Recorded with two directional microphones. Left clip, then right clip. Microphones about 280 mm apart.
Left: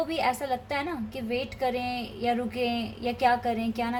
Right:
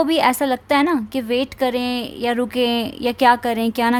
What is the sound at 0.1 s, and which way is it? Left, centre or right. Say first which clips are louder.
A woman's voice: right 10 dB; right.